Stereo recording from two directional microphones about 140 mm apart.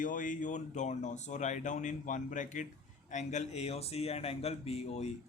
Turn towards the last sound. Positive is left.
turn(degrees=50)  # may be behind; listen again after turning